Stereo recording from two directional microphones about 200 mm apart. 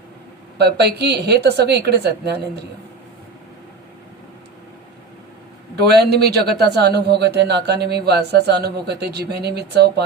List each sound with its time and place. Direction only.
0.6 s a man's voice: 55° right (ahead or behind)
5.7 s a man's voice: 55° right (ahead or behind)